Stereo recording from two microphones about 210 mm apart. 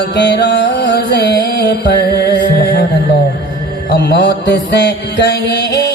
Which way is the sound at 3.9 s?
55° left (ahead or behind).